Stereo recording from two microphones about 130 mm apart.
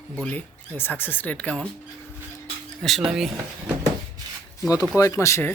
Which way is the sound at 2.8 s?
Centre (ahead or behind).